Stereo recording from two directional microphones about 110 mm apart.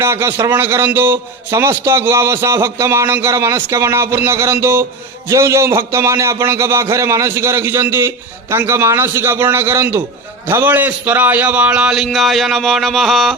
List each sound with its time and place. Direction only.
0.0 s a man's voice: 25° right (ahead or behind); by 13.3 s centre (ahead or behind)